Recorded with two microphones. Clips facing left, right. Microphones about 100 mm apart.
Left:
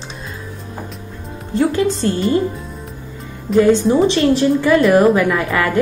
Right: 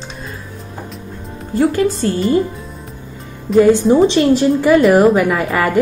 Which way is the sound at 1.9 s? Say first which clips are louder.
Right 1 dB; centre (ahead or behind).